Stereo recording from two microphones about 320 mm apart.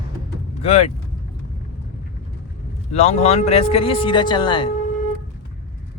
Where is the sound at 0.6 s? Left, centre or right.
Centre.